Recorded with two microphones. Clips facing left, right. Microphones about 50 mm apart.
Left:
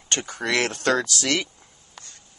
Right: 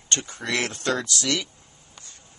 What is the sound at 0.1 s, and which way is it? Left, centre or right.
Speech, left.